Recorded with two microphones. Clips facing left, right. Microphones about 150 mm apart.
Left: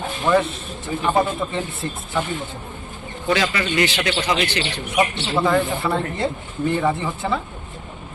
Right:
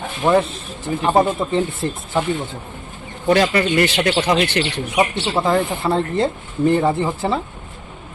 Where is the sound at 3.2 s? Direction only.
45° right (ahead or behind).